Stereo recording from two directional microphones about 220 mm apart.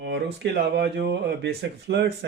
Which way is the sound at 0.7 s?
50° right (ahead or behind).